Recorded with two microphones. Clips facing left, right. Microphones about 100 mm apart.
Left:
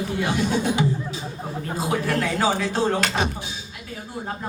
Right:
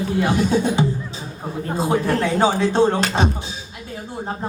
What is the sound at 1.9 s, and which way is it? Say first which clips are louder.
A woman's voice: right 4 dB; 30° right (ahead or behind).